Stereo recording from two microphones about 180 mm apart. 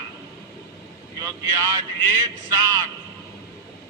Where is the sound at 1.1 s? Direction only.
15° right (ahead or behind).